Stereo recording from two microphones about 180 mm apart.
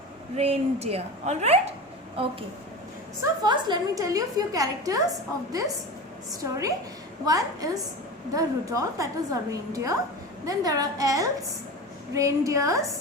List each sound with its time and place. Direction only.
0.3 s a woman's voice: 35° right (ahead or behind)
3.4 s a woman's voice: 25° right (ahead or behind)